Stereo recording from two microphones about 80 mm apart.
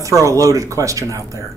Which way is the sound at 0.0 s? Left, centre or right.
Right.